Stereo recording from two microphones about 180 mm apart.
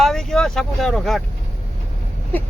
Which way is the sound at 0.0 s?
Centre (ahead or behind).